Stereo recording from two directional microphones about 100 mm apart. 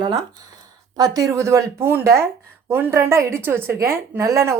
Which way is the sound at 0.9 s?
35° right (ahead or behind).